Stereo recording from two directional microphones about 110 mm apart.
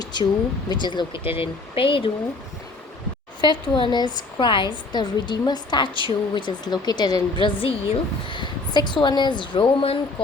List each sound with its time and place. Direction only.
0.0 s a sound: 40° left (ahead or behind)
0.7 s a woman's voice: 45° left (ahead or behind)
3.4 s a woman's voice: 45° left (ahead or behind)